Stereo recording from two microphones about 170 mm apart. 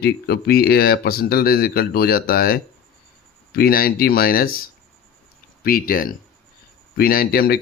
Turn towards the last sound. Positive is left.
turn(degrees=60)  # may be behind; listen again after turning